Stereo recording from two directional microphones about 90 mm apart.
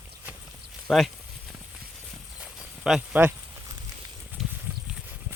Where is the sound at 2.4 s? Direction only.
5° right (ahead or behind).